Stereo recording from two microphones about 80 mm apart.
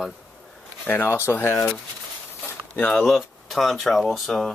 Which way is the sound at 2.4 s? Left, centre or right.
Left.